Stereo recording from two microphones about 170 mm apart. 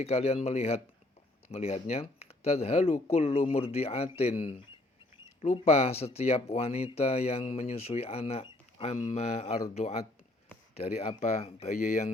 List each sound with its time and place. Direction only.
0.0 s speech: 40° left (ahead or behind)
10.8 s speech: 35° left (ahead or behind)